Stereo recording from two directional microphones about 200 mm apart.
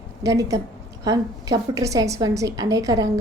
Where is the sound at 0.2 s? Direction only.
15° right (ahead or behind).